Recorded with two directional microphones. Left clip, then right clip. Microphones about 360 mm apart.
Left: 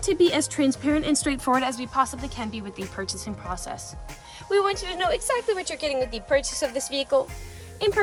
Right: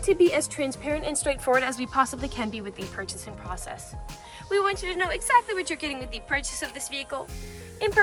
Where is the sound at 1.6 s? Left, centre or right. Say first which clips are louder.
Even; centre.